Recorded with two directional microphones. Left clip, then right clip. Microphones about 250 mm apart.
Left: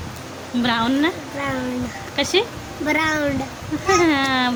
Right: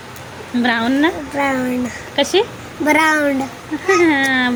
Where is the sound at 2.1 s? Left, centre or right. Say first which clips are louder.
Right 4 dB; centre.